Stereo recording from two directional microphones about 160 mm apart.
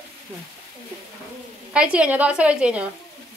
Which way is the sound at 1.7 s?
5° right (ahead or behind).